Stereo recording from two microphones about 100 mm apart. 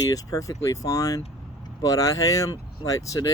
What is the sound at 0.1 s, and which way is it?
Speech, 35° left (ahead or behind).